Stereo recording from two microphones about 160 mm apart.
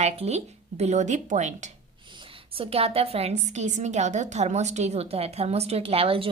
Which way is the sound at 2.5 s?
40° right (ahead or behind).